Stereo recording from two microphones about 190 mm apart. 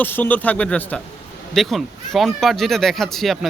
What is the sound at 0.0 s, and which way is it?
Speech, 10° left (ahead or behind).